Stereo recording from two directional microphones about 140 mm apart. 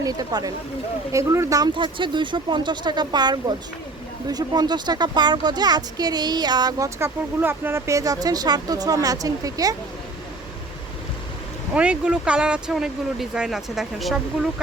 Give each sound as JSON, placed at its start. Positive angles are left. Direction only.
{"t": 0.0, "sound": "speech", "side_deg": -25}
{"t": 11.7, "sound": "speech", "side_deg": -10}